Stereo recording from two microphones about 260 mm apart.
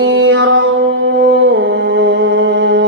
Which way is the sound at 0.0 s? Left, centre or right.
Right.